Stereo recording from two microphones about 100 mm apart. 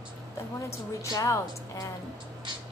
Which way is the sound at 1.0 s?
30° left (ahead or behind).